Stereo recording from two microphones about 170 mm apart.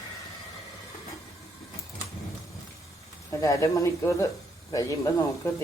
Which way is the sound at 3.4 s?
20° left (ahead or behind).